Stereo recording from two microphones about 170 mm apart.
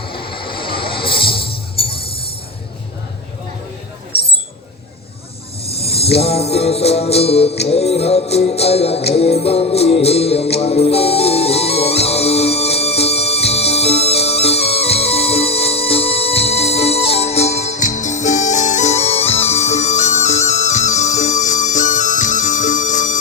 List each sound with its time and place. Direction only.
0.0 s music: 30° left (ahead or behind)
5.6 s music: 35° left (ahead or behind)